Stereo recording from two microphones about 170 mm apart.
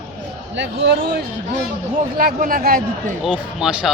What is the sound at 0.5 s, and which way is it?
Speech, 90° right.